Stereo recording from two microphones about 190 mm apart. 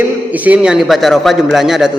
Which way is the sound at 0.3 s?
10° right (ahead or behind).